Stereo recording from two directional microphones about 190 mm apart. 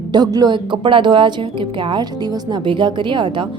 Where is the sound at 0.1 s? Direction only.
20° right (ahead or behind).